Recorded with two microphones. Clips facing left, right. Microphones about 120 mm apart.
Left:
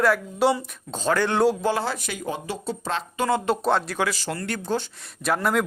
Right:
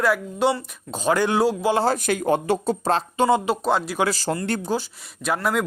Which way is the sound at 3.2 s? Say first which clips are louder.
Right 4 dB; 20° right (ahead or behind).